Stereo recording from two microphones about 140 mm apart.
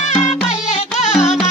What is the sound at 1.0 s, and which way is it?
Music, 55° left (ahead or behind).